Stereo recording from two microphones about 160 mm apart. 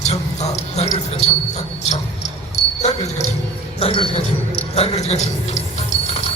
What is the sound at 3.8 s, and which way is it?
A man's voice, 35° left (ahead or behind).